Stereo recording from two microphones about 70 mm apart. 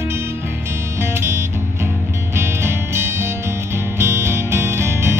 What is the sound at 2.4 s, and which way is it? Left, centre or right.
Music, right.